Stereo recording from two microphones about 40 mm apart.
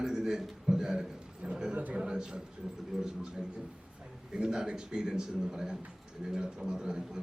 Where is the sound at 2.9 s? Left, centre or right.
Centre.